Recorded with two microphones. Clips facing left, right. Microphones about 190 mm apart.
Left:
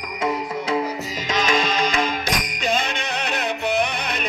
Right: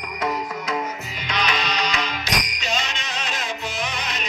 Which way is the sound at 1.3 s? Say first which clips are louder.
Left 4 dB; 45° left (ahead or behind).